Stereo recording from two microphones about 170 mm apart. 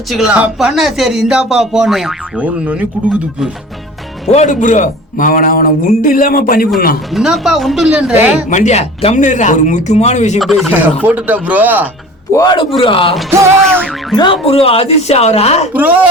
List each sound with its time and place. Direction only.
0.1 s speech: 5° right (ahead or behind)
4.3 s a man's voice: 45° left (ahead or behind); by 6.7 s 60° left (ahead or behind)
7.1 s speech: centre (ahead or behind)
8.4 s speech: 45° left (ahead or behind)
10.4 s speech: centre (ahead or behind)
12.3 s speech: 20° left (ahead or behind)
13.3 s speech: 15° right (ahead or behind)
14.4 s speech: 35° left (ahead or behind)
15.7 s speech: 10° right (ahead or behind)